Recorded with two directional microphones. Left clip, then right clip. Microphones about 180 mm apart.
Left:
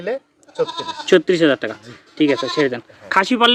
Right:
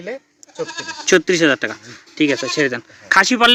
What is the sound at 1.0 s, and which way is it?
Speech, 10° right (ahead or behind).